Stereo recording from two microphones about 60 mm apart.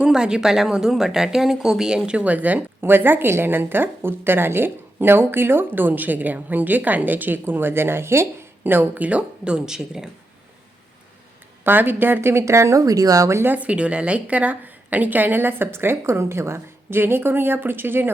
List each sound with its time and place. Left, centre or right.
0.0 s a woman's voice: centre
2.0 s speech: right
2.8 s a woman's voice: right; by 10.1 s centre
11.6 s a woman's voice: right
12.3 s speech: right
13.4 s a woman's voice: right